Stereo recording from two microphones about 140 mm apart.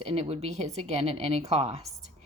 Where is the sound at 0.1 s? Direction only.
45° right (ahead or behind).